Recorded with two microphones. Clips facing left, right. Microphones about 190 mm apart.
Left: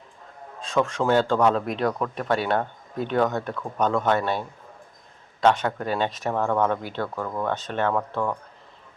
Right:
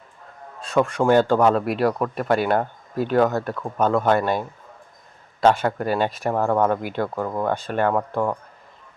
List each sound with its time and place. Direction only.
0.7 s speech: 10° right (ahead or behind)